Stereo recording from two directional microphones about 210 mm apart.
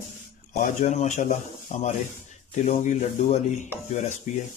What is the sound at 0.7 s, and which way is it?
Speech, 35° left (ahead or behind).